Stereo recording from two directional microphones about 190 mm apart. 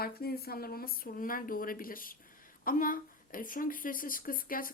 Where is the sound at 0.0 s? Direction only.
55° left (ahead or behind).